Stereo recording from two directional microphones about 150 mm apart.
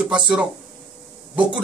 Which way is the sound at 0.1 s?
5° right (ahead or behind).